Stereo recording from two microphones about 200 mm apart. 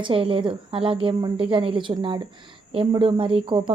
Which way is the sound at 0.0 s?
25° right (ahead or behind).